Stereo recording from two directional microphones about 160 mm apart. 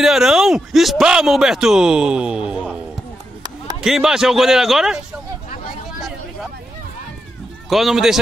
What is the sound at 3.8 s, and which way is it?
A man's voice, 5° right (ahead or behind).